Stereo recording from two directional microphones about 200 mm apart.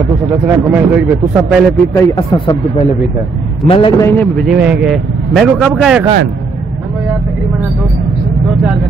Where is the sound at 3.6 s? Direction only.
25° left (ahead or behind).